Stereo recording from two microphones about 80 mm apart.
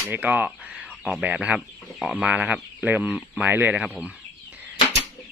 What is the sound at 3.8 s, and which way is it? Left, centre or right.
Speech, centre.